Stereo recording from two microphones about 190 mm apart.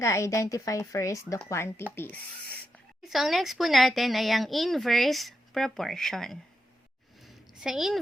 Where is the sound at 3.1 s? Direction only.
Centre (ahead or behind).